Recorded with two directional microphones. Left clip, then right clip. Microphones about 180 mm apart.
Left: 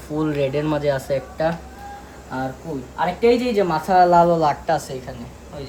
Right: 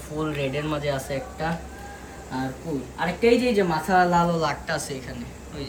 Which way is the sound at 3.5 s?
45° left (ahead or behind).